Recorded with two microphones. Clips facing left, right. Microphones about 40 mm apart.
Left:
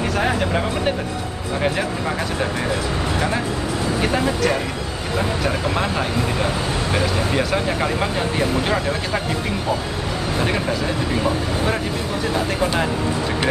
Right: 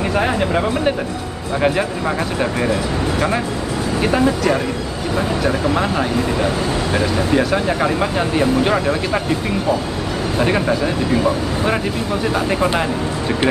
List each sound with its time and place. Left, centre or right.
0.2 s speech: centre
4.0 s speech: centre
7.3 s speech: centre
10.4 s speech: centre